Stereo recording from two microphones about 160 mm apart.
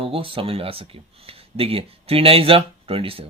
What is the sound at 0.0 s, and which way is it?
Speech, 35° right (ahead or behind).